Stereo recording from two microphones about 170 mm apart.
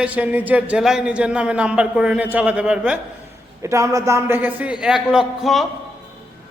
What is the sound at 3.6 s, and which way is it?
A man's voice, 20° right (ahead or behind).